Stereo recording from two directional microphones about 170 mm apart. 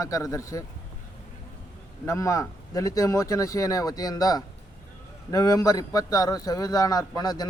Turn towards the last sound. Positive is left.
turn(degrees=25)  # may be behind; listen again after turning